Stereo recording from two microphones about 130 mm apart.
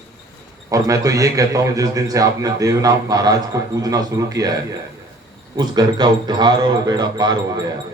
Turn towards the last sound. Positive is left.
turn(degrees=-35)  # may be behind; listen again after turning